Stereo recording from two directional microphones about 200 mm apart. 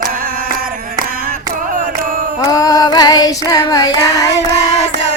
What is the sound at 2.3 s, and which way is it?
Female singing, 15° left (ahead or behind).